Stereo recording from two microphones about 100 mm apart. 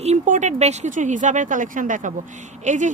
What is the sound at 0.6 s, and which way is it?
Speech, 90° right.